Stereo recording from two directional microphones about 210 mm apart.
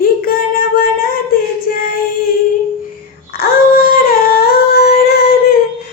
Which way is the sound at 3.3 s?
45° left (ahead or behind).